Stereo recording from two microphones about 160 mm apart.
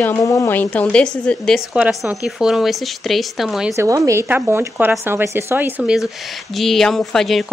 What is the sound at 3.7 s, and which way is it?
Speech, 20° right (ahead or behind).